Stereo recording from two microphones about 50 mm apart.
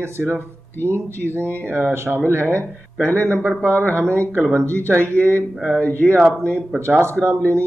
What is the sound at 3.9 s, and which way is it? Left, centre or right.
Speech, right.